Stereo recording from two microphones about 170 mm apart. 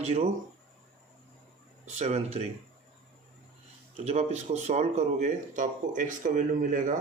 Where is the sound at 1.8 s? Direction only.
40° right (ahead or behind).